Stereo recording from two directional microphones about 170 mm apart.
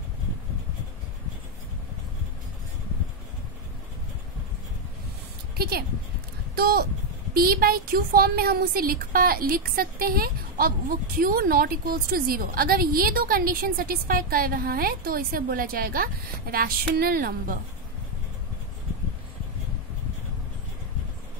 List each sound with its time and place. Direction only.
5.6 s speech: 65° right (ahead or behind)